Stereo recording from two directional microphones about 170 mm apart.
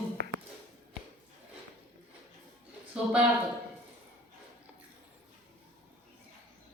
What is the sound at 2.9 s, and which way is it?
Speech, 5° right (ahead or behind).